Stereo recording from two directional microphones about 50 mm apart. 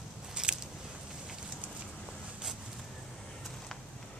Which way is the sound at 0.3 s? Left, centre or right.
Centre.